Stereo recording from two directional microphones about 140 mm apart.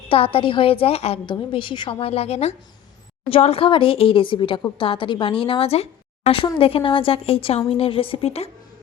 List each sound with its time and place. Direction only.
0.1 s a woman's voice: 40° left (ahead or behind)